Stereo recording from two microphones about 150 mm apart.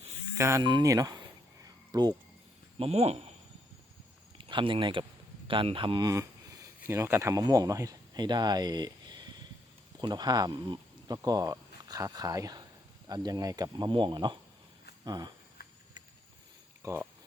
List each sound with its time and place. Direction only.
0.3 s speech: 20° right (ahead or behind)
1.6 s a sound: 25° right (ahead or behind)
2.7 s speech: 40° right (ahead or behind)
4.4 s speech: 35° right (ahead or behind)
15.6 s a sound: 90° left
16.8 s speech: 15° right (ahead or behind)